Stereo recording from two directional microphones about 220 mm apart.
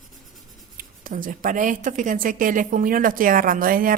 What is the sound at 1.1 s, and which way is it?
Speech, 40° right (ahead or behind).